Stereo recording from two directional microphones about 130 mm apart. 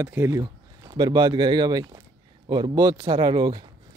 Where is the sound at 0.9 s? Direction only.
30° right (ahead or behind).